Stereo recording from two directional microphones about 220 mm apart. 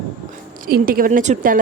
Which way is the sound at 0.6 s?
40° right (ahead or behind).